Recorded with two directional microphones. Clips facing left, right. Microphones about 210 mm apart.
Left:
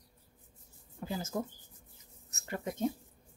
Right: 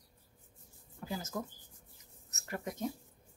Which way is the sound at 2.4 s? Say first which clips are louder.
Left 4 dB; 25° left (ahead or behind).